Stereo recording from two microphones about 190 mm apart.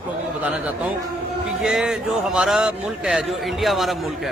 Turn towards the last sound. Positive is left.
turn(degrees=0)  # may be behind; listen again after turning